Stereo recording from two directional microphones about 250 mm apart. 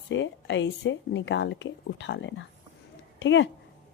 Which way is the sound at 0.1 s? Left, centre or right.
Left.